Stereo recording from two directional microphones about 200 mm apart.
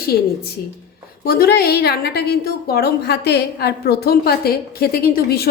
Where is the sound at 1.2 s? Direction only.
50° left (ahead or behind).